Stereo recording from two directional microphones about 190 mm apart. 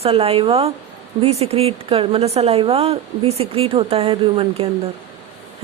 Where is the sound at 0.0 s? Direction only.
30° right (ahead or behind).